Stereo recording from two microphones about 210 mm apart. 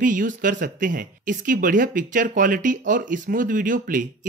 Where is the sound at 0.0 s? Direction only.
40° right (ahead or behind).